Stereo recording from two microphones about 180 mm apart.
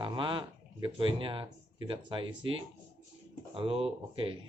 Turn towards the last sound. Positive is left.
turn(degrees=-30)  # may be behind; listen again after turning